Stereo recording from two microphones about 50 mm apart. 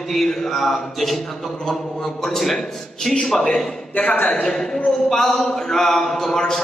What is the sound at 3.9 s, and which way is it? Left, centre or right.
Speech, left.